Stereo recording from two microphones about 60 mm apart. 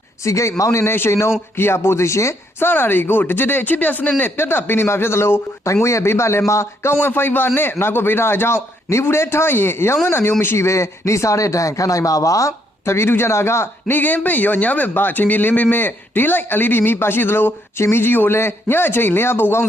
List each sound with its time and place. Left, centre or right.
0.3 s a man's voice: left
0.9 s a man's voice: left
2.6 s speech: left
4.2 s a man's voice: left
7.0 s a man's voice: left
13.9 s speech: left